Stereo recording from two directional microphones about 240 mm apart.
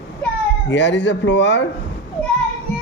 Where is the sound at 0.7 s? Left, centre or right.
Left.